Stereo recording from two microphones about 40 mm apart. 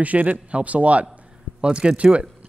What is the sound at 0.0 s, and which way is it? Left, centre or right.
A man's voice, right.